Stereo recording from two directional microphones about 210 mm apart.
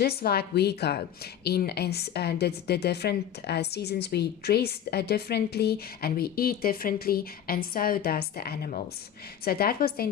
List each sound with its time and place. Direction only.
0.0 s a woman's voice: 50° left (ahead or behind)